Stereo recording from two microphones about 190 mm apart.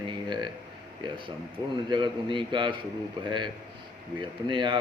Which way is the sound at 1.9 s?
25° right (ahead or behind).